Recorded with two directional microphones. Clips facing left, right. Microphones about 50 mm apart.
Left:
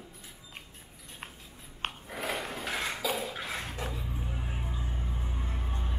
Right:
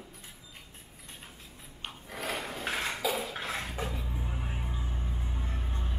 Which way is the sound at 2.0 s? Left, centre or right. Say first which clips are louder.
Right 1 dB; centre.